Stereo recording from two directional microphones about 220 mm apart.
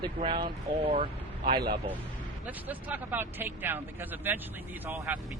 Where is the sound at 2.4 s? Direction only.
5° right (ahead or behind).